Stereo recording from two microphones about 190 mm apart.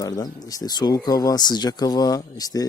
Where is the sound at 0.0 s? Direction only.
20° left (ahead or behind).